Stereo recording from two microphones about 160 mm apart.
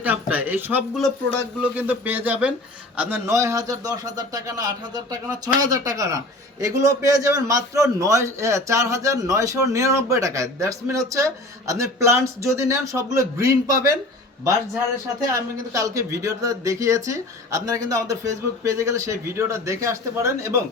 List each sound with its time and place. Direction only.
0.0 s speech: 10° right (ahead or behind)
0.9 s speech: centre (ahead or behind)
1.6 s a man's voice: 10° right (ahead or behind)
15.2 s a man's voice: 20° right (ahead or behind)